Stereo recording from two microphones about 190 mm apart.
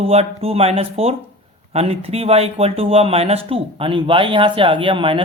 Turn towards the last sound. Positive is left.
turn(degrees=-25)  # may be behind; listen again after turning